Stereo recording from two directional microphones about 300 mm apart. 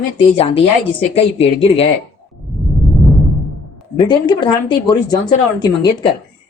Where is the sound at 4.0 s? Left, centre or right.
Centre.